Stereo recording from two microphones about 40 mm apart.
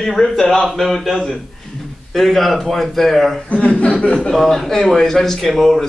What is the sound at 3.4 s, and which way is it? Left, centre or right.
Speech, left.